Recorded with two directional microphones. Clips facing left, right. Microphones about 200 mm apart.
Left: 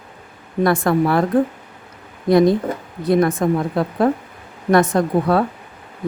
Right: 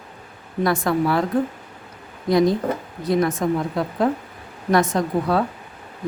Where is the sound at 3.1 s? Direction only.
55° left (ahead or behind).